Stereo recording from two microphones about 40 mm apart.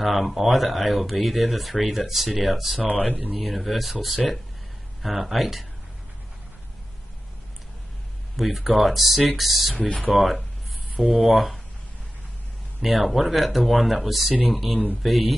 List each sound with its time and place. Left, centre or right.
0.0 s speech: centre
3.0 s speech: right
3.3 s speech: centre
8.4 s speech: centre
9.8 s speech: left
10.1 s speech: centre
12.8 s speech: centre